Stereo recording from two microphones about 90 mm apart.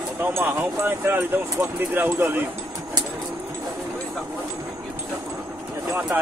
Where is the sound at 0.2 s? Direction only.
25° right (ahead or behind).